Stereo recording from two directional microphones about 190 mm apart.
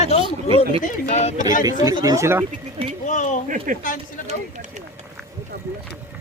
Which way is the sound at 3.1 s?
40° left (ahead or behind).